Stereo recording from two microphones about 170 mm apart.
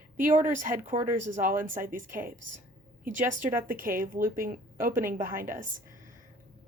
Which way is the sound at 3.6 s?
55° right (ahead or behind).